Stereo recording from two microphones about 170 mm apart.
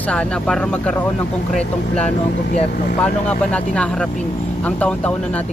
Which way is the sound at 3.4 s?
5° left (ahead or behind).